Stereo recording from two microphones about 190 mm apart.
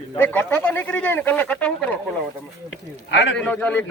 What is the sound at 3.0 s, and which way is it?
Speech, 70° left (ahead or behind).